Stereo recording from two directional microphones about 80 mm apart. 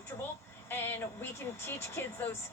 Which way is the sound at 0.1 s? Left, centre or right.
Left.